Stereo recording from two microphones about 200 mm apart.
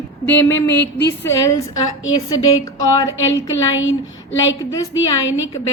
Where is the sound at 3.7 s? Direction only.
80° left.